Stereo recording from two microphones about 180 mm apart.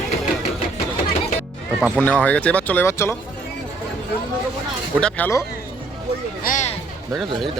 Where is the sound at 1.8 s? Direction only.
5° right (ahead or behind).